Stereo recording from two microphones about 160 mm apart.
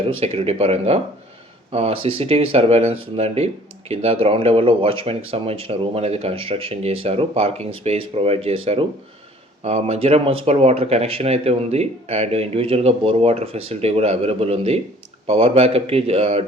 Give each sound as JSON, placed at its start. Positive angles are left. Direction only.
{"t": 0.2, "sound": "speech", "side_deg": -40}